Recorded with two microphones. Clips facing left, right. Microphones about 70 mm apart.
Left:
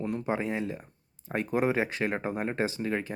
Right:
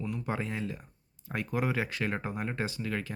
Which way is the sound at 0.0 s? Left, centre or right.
Left.